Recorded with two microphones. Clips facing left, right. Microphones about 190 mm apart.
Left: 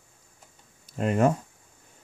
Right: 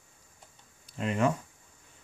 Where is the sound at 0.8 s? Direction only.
45° left (ahead or behind).